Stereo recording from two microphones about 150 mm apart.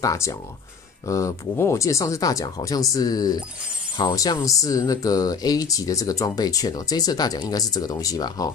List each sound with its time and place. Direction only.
0.0 s speech: 20° left (ahead or behind)